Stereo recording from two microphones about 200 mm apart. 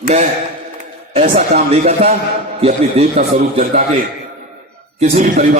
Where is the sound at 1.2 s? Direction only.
45° right (ahead or behind).